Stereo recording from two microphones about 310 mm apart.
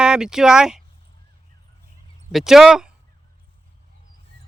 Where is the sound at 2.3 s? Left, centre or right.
Centre.